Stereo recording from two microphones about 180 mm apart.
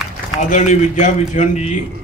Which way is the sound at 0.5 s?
45° left (ahead or behind).